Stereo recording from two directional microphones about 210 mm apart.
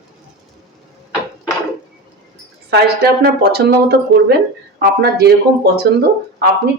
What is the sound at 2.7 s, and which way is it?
A woman's voice, 50° right (ahead or behind).